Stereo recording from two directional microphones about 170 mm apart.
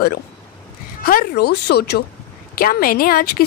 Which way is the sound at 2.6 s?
60° left (ahead or behind).